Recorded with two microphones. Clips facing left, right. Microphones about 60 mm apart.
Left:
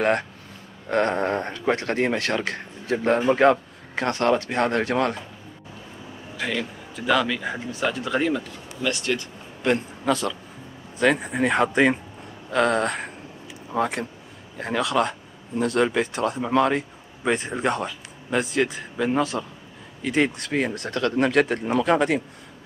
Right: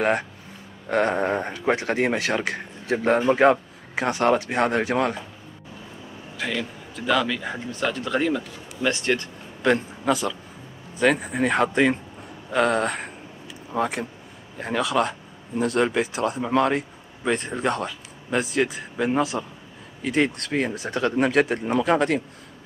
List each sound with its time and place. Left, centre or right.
0.8 s speech: centre
6.3 s speech: centre
8.8 s speech: right
10.0 s speech: centre
12.4 s speech: centre
20.9 s speech: centre
21.3 s speech: centre